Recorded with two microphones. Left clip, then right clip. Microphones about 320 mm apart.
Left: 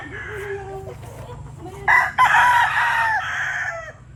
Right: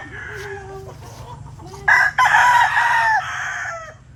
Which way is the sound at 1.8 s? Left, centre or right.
Right.